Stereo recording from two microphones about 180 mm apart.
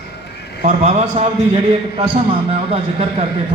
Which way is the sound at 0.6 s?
40° right (ahead or behind).